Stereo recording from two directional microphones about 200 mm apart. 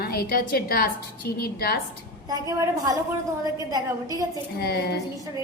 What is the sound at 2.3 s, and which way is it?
A woman's voice, 15° right (ahead or behind).